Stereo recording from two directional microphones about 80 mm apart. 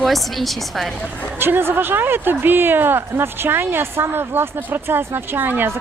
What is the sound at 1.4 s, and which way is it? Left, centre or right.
Speech, right.